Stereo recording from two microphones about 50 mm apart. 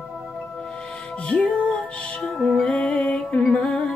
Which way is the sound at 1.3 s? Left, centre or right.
Left.